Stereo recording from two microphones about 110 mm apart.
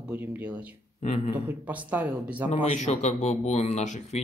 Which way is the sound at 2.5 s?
75° left (ahead or behind).